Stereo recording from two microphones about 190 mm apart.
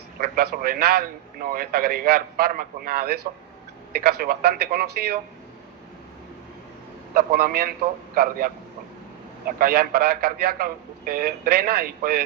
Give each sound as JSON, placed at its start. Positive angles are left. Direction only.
{"t": 0.2, "sound": "a man's voice", "side_deg": -50}
{"t": 7.1, "sound": "a man's voice", "side_deg": -50}
{"t": 9.6, "sound": "a man's voice", "side_deg": -50}